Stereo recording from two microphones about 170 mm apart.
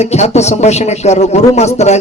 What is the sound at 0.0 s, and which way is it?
A man's voice, 40° left (ahead or behind).